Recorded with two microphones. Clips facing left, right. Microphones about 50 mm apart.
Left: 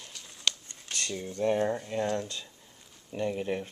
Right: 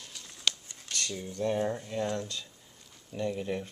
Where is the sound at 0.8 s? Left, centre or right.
Centre.